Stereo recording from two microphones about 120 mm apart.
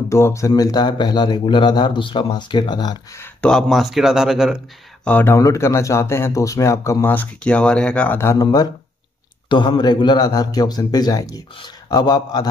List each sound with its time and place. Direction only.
0.1 s a man's voice: 25° left (ahead or behind)
3.3 s speech: 5° left (ahead or behind)
5.0 s speech: 15° left (ahead or behind)
8.4 s a man's voice: 35° left (ahead or behind)